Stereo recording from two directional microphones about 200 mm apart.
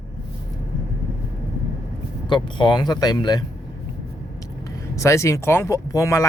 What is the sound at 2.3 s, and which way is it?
Speech, 25° left (ahead or behind).